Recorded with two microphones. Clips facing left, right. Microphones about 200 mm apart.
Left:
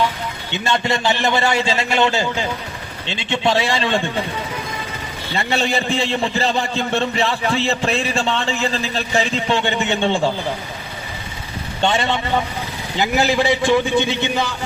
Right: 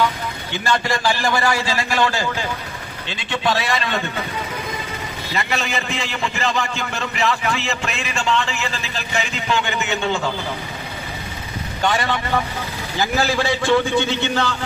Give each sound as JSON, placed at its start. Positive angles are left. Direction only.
{"t": 0.5, "sound": "a man's voice", "side_deg": 25}
{"t": 5.3, "sound": "a man's voice", "side_deg": 30}
{"t": 11.8, "sound": "a man's voice", "side_deg": 25}